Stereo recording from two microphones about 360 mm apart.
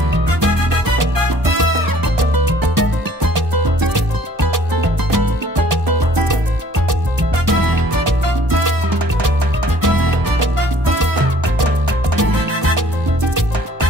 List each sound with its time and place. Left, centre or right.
2.1 s music: right
7.4 s music: right
9.8 s music: right
12.2 s music: right